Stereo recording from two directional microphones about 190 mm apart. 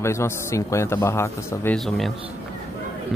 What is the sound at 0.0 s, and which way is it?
A man's voice, 15° left (ahead or behind).